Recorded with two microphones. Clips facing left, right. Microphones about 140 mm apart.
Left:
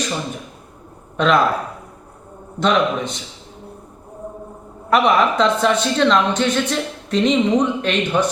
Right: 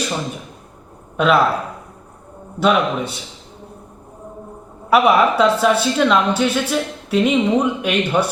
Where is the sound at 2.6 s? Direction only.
10° right (ahead or behind).